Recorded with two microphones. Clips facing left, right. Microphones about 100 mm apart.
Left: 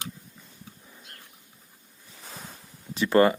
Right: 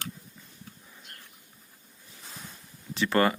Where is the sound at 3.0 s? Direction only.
30° left (ahead or behind).